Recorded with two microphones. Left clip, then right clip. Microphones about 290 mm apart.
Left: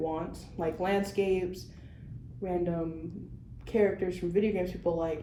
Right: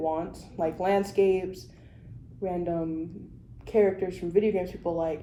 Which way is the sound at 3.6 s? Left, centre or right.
Centre.